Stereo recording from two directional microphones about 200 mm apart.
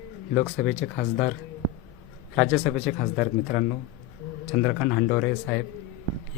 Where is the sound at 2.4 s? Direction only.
10° right (ahead or behind).